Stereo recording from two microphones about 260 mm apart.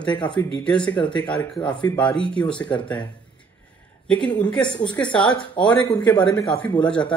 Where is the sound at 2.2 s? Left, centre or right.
Centre.